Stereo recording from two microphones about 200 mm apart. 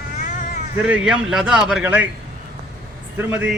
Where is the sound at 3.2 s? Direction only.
10° right (ahead or behind).